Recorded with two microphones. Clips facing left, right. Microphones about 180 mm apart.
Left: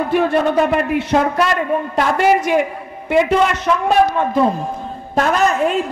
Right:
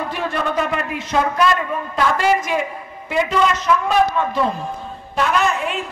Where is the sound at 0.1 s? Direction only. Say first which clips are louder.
Left 11 dB; 55° left (ahead or behind).